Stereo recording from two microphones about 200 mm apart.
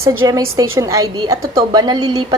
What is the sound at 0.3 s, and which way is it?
A woman's voice, 15° right (ahead or behind).